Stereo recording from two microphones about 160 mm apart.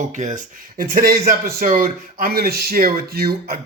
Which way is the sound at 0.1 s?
50° right (ahead or behind).